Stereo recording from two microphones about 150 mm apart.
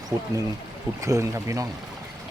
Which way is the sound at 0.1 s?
20° right (ahead or behind).